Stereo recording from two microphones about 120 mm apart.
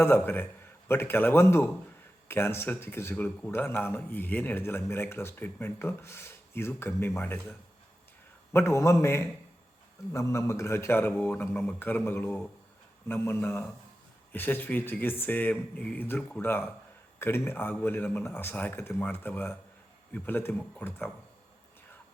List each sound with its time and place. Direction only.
0.0 s speech: 20° left (ahead or behind)
8.5 s speech: 25° left (ahead or behind)